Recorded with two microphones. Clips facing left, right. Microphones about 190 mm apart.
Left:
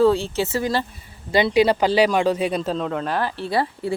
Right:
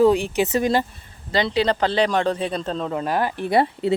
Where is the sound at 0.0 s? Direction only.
15° right (ahead or behind).